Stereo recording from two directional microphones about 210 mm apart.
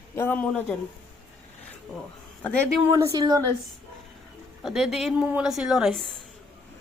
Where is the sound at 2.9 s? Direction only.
15° right (ahead or behind).